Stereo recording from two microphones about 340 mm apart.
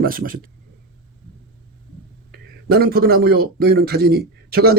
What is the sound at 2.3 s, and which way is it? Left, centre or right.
A man's voice, right.